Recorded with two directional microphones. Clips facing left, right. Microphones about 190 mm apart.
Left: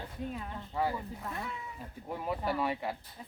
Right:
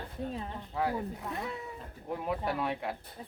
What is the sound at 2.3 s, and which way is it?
Speech, centre (ahead or behind).